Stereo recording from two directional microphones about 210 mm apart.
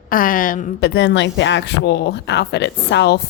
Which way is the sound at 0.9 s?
55° left (ahead or behind).